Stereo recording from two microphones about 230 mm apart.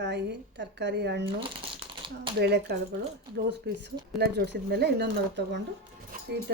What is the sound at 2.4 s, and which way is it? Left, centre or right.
A woman's voice, right.